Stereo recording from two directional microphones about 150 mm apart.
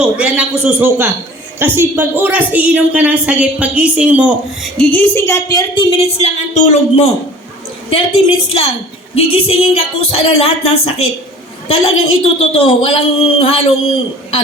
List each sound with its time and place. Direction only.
0.0 s a woman's voice: 10° right (ahead or behind)
4.8 s a woman's voice: 10° left (ahead or behind)
5.9 s speech: 40° left (ahead or behind)
12.4 s speech: 40° left (ahead or behind)